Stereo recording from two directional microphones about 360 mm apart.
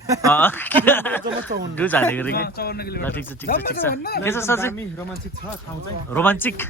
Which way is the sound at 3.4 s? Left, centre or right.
Left.